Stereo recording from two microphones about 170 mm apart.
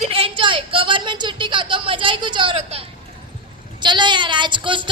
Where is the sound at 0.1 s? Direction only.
30° right (ahead or behind).